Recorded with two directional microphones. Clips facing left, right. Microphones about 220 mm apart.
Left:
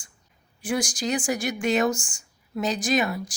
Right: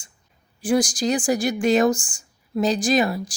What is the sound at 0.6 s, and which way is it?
A woman's voice, 35° right (ahead or behind).